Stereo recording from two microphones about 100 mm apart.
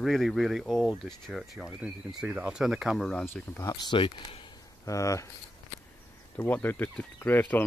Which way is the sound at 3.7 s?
50° left (ahead or behind).